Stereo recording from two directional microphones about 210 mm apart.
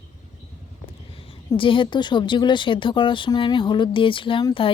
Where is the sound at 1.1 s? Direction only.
25° left (ahead or behind).